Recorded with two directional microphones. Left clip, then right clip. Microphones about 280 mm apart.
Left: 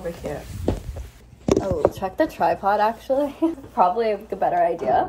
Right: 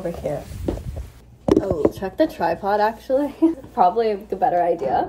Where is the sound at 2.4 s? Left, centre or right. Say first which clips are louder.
Even; centre.